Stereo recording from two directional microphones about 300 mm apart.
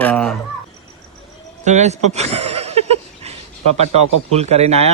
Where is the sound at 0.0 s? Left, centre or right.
Centre.